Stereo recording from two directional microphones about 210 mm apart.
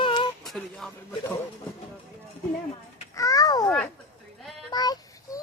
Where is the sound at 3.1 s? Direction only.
15° left (ahead or behind).